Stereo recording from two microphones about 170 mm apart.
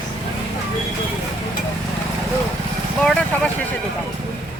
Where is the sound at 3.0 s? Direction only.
5° left (ahead or behind).